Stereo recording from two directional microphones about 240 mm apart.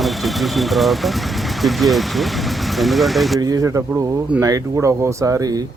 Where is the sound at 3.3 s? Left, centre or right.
Centre.